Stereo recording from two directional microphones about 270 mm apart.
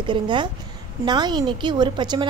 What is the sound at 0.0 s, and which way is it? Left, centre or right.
A woman's voice, centre.